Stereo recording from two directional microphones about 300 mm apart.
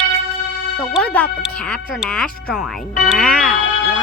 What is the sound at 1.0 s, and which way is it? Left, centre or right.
Speech, centre.